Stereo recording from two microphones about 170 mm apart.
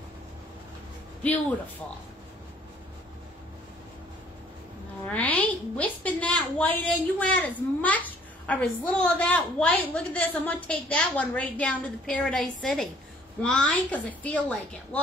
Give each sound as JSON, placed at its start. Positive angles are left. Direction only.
{"t": 5.1, "sound": "a woman's voice", "side_deg": 10}